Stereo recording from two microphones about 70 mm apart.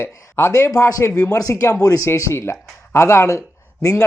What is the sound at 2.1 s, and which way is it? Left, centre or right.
Speech, left.